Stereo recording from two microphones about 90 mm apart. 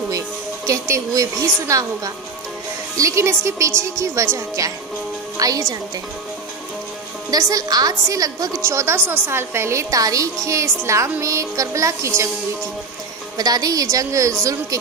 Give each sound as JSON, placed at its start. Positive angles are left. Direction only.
{"t": 0.7, "sound": "a woman's voice", "side_deg": -35}
{"t": 7.2, "sound": "a woman's voice", "side_deg": -40}
{"t": 8.6, "sound": "a woman's voice", "side_deg": -30}
{"t": 13.4, "sound": "a woman's voice", "side_deg": -45}